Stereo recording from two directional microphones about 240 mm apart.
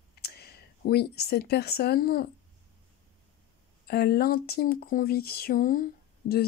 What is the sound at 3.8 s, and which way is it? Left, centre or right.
Speech, left.